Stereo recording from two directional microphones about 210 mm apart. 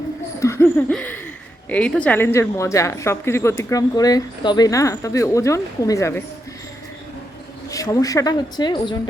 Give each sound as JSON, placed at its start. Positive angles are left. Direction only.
{"t": 0.3, "sound": "laughter", "side_deg": 15}
{"t": 1.7, "sound": "speech", "side_deg": 5}
{"t": 7.7, "sound": "speech", "side_deg": 15}